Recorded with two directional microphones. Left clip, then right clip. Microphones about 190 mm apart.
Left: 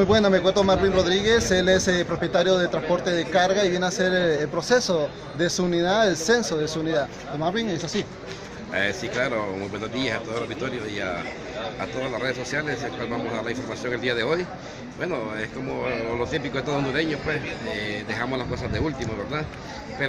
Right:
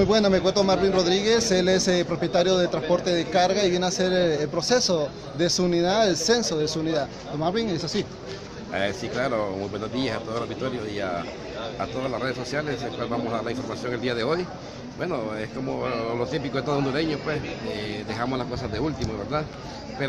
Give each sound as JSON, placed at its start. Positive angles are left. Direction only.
{"t": 0.0, "sound": "a man's voice", "side_deg": 5}
{"t": 8.7, "sound": "speech", "side_deg": -15}
{"t": 12.2, "sound": "speech", "side_deg": -20}